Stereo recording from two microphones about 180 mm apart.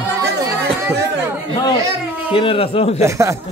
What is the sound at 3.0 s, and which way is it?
Speech, 15° right (ahead or behind).